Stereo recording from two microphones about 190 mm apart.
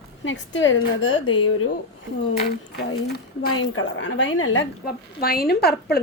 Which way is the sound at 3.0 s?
60° left (ahead or behind).